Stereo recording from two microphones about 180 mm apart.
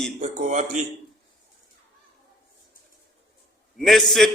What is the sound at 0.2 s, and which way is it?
Speech, 40° right (ahead or behind).